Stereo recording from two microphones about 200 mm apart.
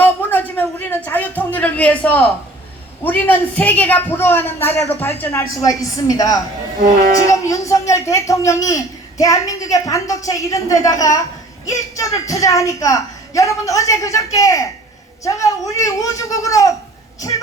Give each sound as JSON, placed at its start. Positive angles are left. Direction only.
{"t": 0.0, "sound": "a sound", "side_deg": 10}
{"t": 3.0, "sound": "speech", "side_deg": 10}
{"t": 6.7, "sound": "speech", "side_deg": -50}
{"t": 7.3, "sound": "speech", "side_deg": 15}